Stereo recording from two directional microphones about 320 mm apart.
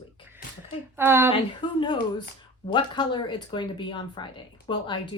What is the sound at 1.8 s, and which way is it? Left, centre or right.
Speech, centre.